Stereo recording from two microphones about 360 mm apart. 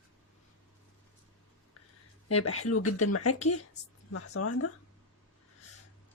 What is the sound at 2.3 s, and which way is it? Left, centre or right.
Speech, left.